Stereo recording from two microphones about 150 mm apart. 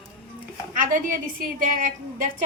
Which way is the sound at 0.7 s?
60° right (ahead or behind).